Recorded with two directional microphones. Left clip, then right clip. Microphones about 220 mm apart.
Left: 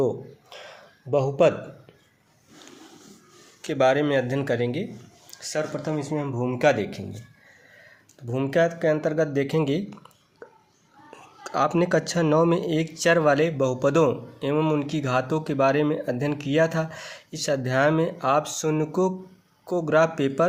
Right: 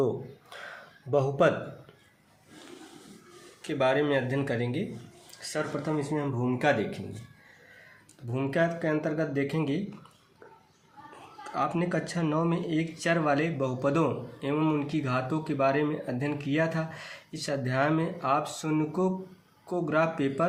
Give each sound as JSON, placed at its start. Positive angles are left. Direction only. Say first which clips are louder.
{"t": 1.1, "sound": "a man's voice", "louder": "left 4 dB", "side_deg": 25}
{"t": 3.6, "sound": "speech", "louder": "left 5 dB", "side_deg": 45}
{"t": 8.3, "sound": "speech", "louder": "left 5 dB", "side_deg": 45}
{"t": 11.4, "sound": "speech", "louder": "left 7 dB", "side_deg": 50}